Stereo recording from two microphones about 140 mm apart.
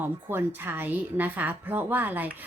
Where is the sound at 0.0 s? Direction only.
15° right (ahead or behind).